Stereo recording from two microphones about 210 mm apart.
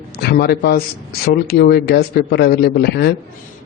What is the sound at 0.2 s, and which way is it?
Speech, 50° left (ahead or behind).